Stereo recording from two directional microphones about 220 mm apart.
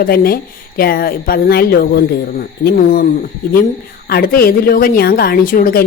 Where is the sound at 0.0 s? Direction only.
40° left (ahead or behind).